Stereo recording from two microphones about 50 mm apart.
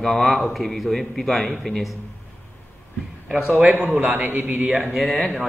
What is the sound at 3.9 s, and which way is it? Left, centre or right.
Speech, right.